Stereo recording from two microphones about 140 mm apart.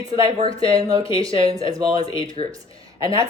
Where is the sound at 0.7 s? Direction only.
25° right (ahead or behind).